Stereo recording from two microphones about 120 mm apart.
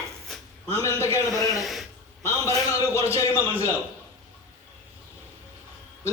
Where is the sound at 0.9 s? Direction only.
25° left (ahead or behind).